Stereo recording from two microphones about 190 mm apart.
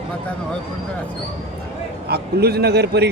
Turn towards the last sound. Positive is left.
turn(degrees=-60)  # may be behind; listen again after turning